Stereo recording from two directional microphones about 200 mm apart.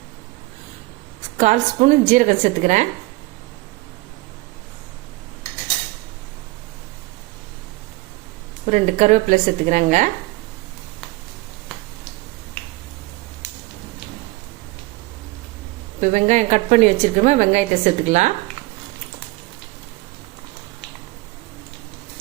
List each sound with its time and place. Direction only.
1.4 s a woman's voice: 40° right (ahead or behind)
8.7 s a woman's voice: 35° right (ahead or behind)
16.0 s a woman's voice: 35° right (ahead or behind)